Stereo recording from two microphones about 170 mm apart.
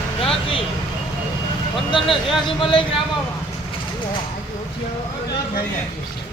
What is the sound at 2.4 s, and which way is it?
Speech, 30° left (ahead or behind).